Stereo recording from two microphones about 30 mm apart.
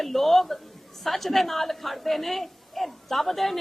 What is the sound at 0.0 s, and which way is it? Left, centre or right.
A man's voice, centre.